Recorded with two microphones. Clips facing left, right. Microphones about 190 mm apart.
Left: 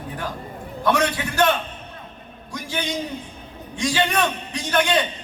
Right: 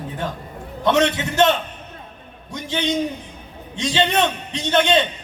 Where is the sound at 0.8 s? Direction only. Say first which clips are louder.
Right 3 dB; 25° right (ahead or behind).